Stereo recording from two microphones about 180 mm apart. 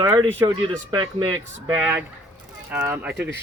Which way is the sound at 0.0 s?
15° right (ahead or behind).